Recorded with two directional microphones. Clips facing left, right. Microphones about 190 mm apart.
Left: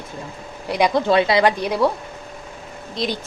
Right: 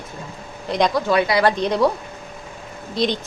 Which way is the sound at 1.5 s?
5° left (ahead or behind).